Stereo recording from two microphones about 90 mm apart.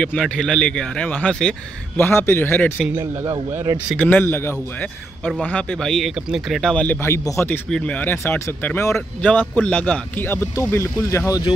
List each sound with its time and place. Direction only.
0.0 s speech: 10° left (ahead or behind)
2.0 s speech: 25° left (ahead or behind)
3.0 s speech: 40° right (ahead or behind)
3.9 s speech: 15° left (ahead or behind); by 6.7 s centre (ahead or behind)
6.7 s speech: 15° left (ahead or behind)
7.0 s speech: 30° left (ahead or behind)
7.7 s speech: 15° left (ahead or behind)
9.2 s speech: 15° left (ahead or behind)
10.5 s speech: 35° left (ahead or behind)